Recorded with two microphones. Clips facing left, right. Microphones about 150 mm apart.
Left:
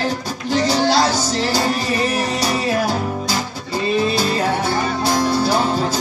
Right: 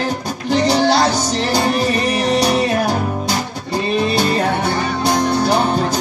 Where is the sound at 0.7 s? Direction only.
55° right (ahead or behind).